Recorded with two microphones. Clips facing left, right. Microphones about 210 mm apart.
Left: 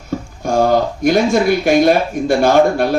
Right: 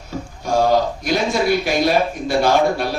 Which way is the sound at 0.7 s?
50° left (ahead or behind).